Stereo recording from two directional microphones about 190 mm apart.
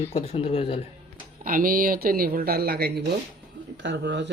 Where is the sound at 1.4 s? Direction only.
45° right (ahead or behind).